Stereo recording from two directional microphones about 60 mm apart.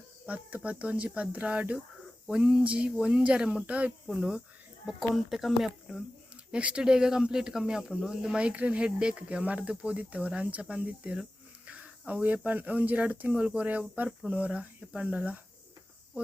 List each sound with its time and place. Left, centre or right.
0.3 s speech: right
4.9 s speech: centre
6.5 s speech: centre
8.4 s speech: right
11.6 s a sound: right
12.5 s speech: right